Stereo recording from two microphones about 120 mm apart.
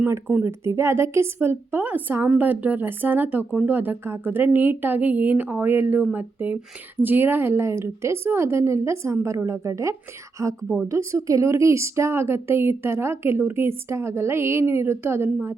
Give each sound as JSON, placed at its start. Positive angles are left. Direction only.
{"t": 0.0, "sound": "a woman's voice", "side_deg": -15}